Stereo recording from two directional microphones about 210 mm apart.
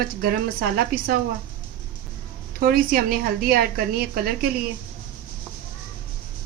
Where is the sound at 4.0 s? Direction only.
45° right (ahead or behind).